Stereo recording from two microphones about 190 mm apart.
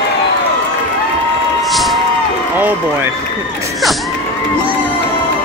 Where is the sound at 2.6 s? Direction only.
10° right (ahead or behind).